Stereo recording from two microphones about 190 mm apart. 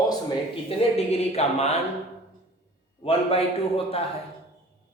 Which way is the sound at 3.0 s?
30° left (ahead or behind).